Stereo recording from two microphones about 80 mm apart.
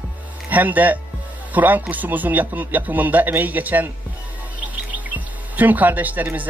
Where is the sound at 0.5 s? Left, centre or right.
Right.